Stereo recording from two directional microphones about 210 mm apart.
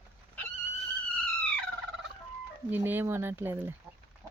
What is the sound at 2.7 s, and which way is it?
Speech, 10° right (ahead or behind).